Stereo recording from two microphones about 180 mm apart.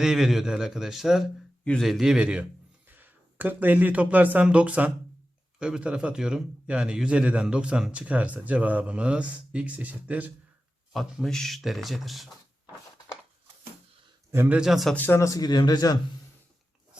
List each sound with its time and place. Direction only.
0.0 s a man's voice: 5° right (ahead or behind)
10.9 s speech: centre (ahead or behind)
14.3 s speech: 10° right (ahead or behind)
14.9 s a man's voice: 10° left (ahead or behind)